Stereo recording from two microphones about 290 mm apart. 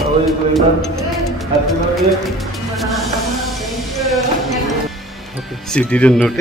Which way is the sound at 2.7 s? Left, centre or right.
Centre.